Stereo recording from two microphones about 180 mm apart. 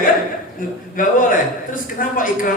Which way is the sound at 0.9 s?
50° left (ahead or behind).